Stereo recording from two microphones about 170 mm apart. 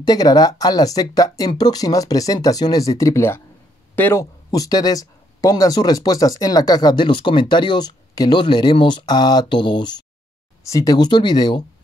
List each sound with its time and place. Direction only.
0.0 s speech: 25° left (ahead or behind)